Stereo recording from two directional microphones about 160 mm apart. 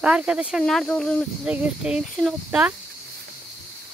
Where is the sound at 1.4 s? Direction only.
5° right (ahead or behind).